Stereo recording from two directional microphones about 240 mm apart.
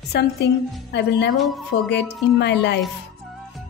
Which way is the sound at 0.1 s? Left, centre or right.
Left.